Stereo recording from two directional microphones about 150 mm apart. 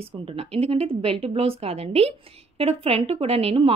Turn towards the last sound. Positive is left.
turn(degrees=-40)  # may be behind; listen again after turning